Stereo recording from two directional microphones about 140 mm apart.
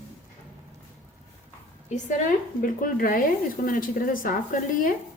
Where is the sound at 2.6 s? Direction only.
80° left.